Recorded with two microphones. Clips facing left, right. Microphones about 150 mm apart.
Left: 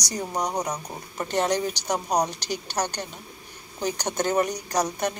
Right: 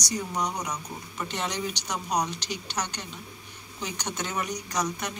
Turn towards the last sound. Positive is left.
turn(degrees=40)  # may be behind; listen again after turning